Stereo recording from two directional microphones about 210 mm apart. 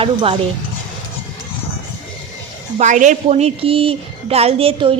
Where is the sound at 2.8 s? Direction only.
35° right (ahead or behind).